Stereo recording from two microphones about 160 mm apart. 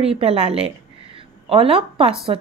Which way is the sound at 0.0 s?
35° right (ahead or behind).